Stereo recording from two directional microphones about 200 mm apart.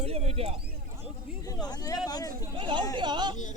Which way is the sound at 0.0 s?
30° right (ahead or behind).